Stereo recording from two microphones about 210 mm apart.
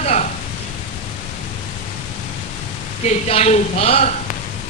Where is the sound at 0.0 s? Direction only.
35° left (ahead or behind).